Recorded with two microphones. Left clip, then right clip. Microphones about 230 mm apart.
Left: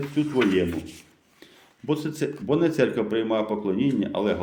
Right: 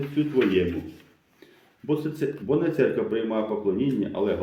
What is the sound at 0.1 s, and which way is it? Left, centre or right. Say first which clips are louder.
Speech: even; left.